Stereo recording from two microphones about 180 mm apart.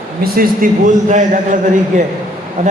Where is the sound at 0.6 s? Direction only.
50° right (ahead or behind).